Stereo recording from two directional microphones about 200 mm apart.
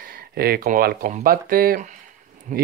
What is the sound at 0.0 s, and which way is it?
Speech, 45° right (ahead or behind).